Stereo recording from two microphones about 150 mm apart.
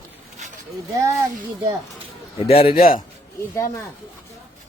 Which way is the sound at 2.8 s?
65° left (ahead or behind).